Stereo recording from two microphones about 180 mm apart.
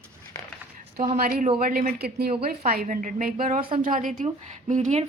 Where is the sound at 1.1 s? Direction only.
50° right (ahead or behind).